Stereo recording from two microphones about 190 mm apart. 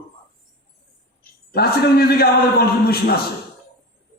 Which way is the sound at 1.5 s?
55° left (ahead or behind).